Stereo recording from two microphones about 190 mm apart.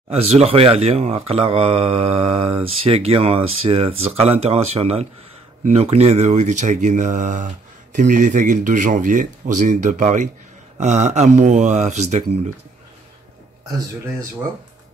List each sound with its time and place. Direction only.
0.1 s speech: 35° right (ahead or behind)